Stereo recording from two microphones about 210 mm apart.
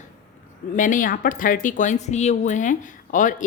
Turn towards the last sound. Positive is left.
turn(degrees=40)  # may be behind; listen again after turning